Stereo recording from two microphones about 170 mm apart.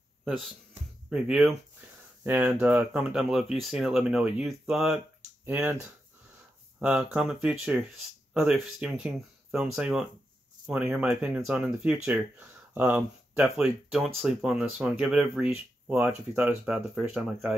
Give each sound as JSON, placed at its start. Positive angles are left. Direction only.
{"t": 0.2, "sound": "speech", "side_deg": 0}
{"t": 6.8, "sound": "speech", "side_deg": -10}